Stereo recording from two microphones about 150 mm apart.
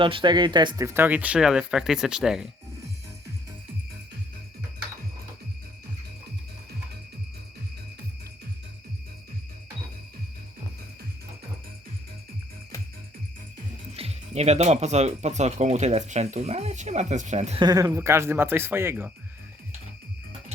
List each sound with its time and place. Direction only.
0.0 s speech: 35° right (ahead or behind)
0.9 s speech: 10° right (ahead or behind)
13.9 s speech: 40° right (ahead or behind)
17.6 s speech: 25° right (ahead or behind)